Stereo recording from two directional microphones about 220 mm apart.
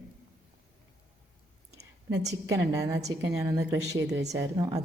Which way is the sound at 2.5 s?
15° right (ahead or behind).